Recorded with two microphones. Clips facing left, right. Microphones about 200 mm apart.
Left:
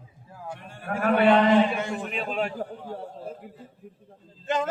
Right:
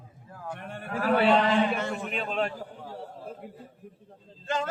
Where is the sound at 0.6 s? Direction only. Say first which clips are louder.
Right 6 dB; 60° right (ahead or behind).